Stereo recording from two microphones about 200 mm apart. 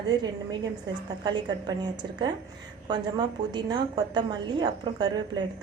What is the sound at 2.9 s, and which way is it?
A woman's voice, 20° right (ahead or behind).